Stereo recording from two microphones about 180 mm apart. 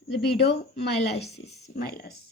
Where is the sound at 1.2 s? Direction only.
70° left (ahead or behind).